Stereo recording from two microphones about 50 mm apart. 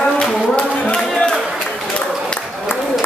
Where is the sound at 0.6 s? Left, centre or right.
Left.